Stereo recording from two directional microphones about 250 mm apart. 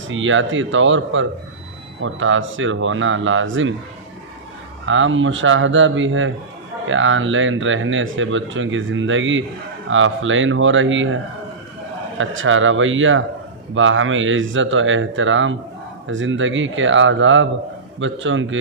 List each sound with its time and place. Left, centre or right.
0.1 s speech: right
4.8 s speech: right
12.2 s speech: right